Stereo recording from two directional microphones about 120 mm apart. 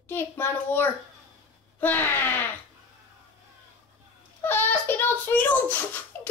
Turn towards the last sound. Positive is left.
turn(degrees=15)  # may be behind; listen again after turning